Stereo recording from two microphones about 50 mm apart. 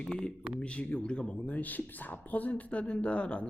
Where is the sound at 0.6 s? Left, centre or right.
Left.